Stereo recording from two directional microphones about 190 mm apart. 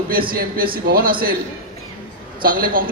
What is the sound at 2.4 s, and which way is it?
Speech, 50° right (ahead or behind).